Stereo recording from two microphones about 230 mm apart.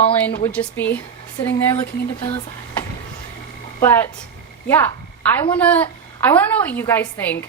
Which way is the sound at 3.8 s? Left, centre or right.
Centre.